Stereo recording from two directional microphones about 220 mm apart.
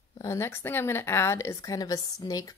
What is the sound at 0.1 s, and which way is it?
A woman's voice, 15° left (ahead or behind).